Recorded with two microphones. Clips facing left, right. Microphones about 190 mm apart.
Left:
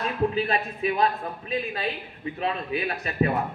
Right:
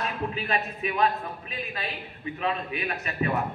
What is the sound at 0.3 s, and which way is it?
Speech, 35° left (ahead or behind).